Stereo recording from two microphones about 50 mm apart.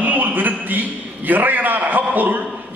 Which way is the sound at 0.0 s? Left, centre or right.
Right.